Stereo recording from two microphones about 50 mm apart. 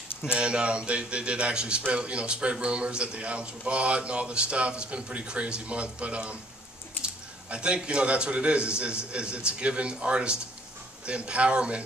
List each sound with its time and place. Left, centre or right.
0.3 s a man's voice: right